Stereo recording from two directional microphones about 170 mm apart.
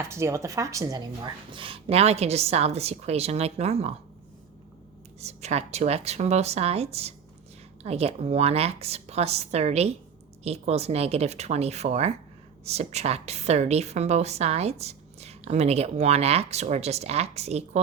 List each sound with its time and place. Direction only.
0.0 s a woman's voice: 15° right (ahead or behind); by 3.9 s 40° right (ahead or behind)
5.2 s a woman's voice: 40° right (ahead or behind)